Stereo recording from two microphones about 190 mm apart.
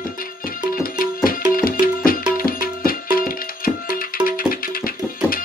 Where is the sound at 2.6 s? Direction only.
50° left (ahead or behind).